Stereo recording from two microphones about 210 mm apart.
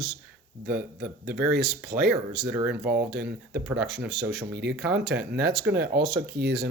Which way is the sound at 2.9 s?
50° right (ahead or behind).